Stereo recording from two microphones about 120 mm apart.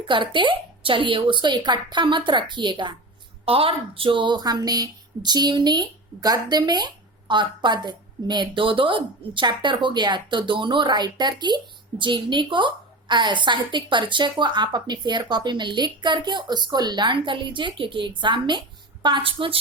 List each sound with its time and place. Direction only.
0.1 s speech: 40° right (ahead or behind)
3.4 s a woman's voice: 50° right (ahead or behind)